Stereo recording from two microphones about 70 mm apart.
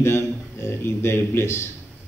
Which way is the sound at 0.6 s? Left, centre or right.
Left.